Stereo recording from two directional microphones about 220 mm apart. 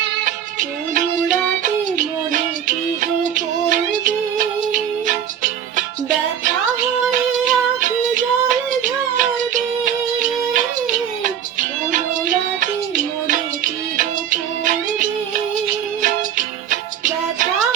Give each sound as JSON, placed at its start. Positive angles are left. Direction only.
{"t": 1.6, "sound": "music", "side_deg": -35}
{"t": 7.1, "sound": "music", "side_deg": -35}
{"t": 11.9, "sound": "music", "side_deg": -35}
{"t": 16.6, "sound": "music", "side_deg": -35}